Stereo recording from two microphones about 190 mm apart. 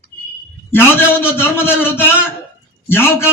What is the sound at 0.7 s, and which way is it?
A man's voice, 10° left (ahead or behind).